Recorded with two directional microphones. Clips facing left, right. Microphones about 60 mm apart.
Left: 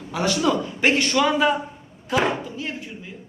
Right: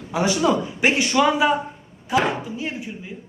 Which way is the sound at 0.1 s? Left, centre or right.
Centre.